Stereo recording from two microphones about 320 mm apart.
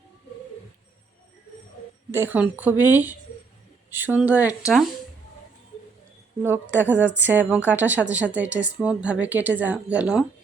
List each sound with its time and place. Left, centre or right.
2.1 s a woman's voice: centre
6.4 s a woman's voice: centre